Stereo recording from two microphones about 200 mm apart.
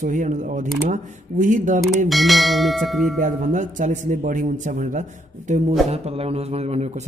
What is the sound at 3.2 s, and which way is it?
Speech, 40° right (ahead or behind).